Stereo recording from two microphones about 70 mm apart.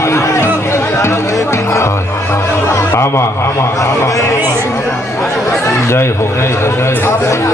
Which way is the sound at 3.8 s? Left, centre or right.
Left.